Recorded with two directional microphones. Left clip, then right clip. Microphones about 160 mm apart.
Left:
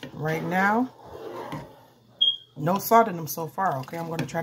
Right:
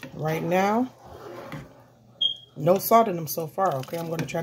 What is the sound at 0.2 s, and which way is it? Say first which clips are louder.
Speech: right 1 dB; 35° left (ahead or behind).